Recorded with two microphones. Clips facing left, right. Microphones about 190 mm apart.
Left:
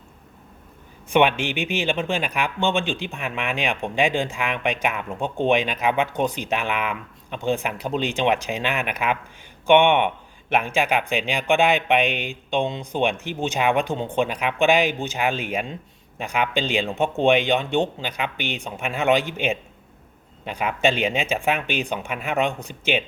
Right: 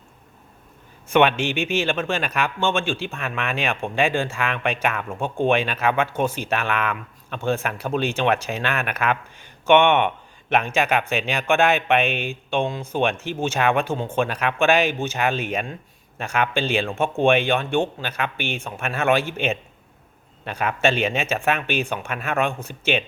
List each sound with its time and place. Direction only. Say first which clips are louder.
1.1 s speech: right 1 dB; 15° left (ahead or behind)